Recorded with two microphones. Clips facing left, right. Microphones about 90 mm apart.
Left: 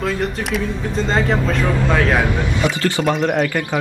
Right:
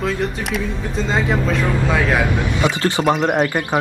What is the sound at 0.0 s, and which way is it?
Speech, centre (ahead or behind).